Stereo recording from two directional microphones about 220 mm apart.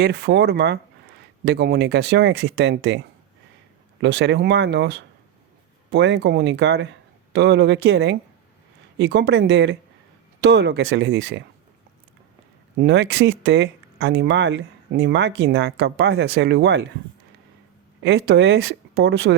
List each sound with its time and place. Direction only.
0.0 s speech: 45° right (ahead or behind)
4.0 s speech: 55° right (ahead or behind)
12.7 s speech: 50° right (ahead or behind)
18.0 s speech: 50° right (ahead or behind)